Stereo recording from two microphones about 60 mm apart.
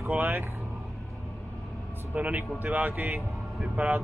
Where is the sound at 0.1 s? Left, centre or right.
Right.